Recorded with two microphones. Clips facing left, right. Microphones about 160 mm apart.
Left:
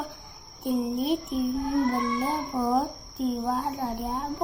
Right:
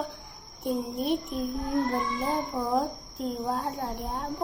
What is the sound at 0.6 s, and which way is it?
Speech, centre (ahead or behind).